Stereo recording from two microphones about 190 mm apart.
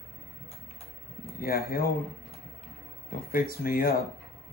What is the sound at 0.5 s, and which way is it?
Tick-tock, 30° left (ahead or behind).